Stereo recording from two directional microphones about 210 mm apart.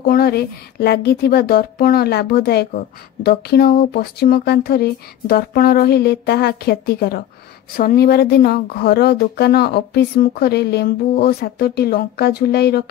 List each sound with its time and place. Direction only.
0.0 s speech: 45° left (ahead or behind)